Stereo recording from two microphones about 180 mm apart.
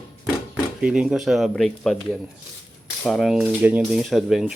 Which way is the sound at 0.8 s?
5° right (ahead or behind).